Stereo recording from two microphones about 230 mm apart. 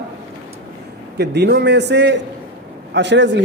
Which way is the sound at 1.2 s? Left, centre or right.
Right.